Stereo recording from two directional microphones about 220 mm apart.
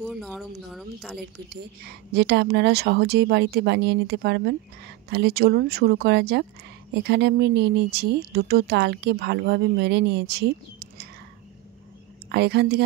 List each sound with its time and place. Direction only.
0.0 s speech: centre (ahead or behind)
1.5 s speech: 50° right (ahead or behind)
12.3 s speech: 50° right (ahead or behind)